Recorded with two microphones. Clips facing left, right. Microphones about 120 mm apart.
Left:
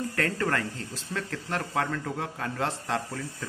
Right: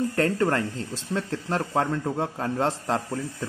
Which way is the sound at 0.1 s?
25° right (ahead or behind).